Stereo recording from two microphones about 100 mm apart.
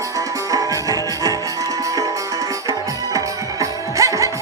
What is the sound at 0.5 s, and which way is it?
Music, 35° right (ahead or behind).